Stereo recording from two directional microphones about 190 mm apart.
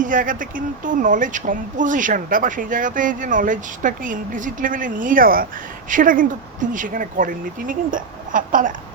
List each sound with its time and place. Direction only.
0.0 s speech: 45° right (ahead or behind)